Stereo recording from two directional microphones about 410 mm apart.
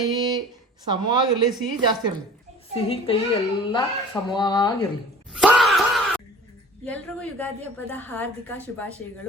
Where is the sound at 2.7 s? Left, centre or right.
Centre.